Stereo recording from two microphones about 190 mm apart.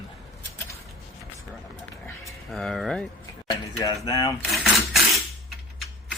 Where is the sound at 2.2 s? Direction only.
Centre (ahead or behind).